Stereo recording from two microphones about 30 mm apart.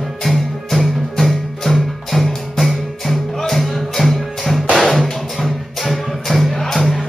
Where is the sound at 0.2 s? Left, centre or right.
Centre.